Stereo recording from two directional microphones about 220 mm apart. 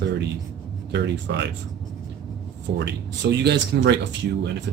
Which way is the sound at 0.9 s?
50° right (ahead or behind).